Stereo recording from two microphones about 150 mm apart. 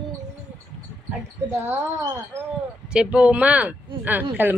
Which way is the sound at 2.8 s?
5° right (ahead or behind).